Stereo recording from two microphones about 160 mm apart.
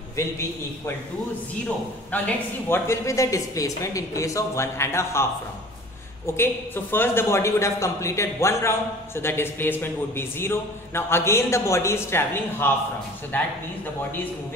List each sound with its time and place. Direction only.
2.1 s speech: 10° left (ahead or behind)
6.2 s a woman's voice: 15° left (ahead or behind)